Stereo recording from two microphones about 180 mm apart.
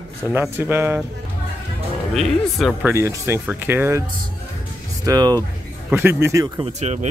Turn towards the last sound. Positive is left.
turn(degrees=-40)  # may be behind; listen again after turning